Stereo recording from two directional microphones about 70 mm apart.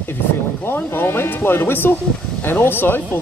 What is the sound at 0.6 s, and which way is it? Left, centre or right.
Speech, left.